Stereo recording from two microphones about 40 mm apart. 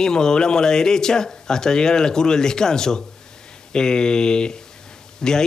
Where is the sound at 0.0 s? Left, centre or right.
Centre.